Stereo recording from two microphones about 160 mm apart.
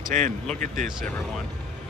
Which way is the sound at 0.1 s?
50° right (ahead or behind).